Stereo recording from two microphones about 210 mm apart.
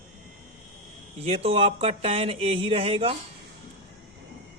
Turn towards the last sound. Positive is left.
turn(degrees=-25)  # may be behind; listen again after turning